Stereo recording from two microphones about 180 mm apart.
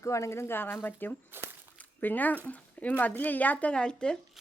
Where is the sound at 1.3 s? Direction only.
10° right (ahead or behind).